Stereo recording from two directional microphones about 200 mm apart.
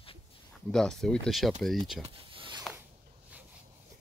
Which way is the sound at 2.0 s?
25° right (ahead or behind).